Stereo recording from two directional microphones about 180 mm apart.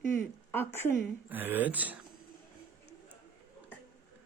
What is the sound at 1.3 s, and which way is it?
Speech, 10° right (ahead or behind).